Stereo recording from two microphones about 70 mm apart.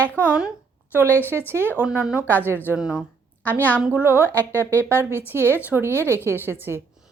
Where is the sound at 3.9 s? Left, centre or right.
Right.